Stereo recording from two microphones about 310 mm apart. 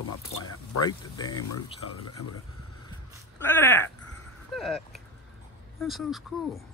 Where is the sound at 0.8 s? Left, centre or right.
Centre.